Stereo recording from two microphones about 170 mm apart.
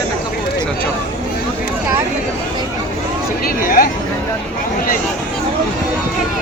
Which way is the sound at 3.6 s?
55° left (ahead or behind).